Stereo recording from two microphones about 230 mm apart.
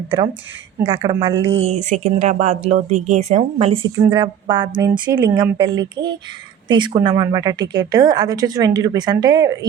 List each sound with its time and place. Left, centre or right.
0.8 s speech: centre
1.6 s speech: right
3.9 s speech: centre